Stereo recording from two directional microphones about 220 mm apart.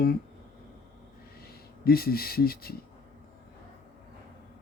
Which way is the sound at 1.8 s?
45° left (ahead or behind).